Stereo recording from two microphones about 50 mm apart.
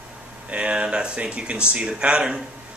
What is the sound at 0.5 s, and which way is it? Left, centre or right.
Speech, right.